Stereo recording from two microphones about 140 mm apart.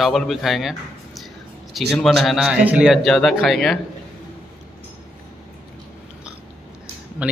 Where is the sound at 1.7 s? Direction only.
Centre (ahead or behind).